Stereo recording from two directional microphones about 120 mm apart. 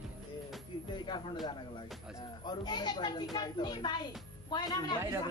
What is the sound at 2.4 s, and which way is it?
A woman's voice, 35° left (ahead or behind).